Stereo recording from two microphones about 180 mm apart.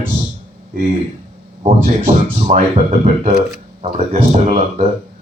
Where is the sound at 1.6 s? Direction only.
40° right (ahead or behind).